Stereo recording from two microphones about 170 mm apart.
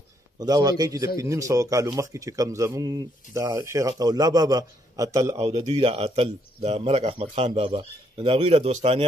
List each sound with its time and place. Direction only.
0.4 s speech: 20° right (ahead or behind)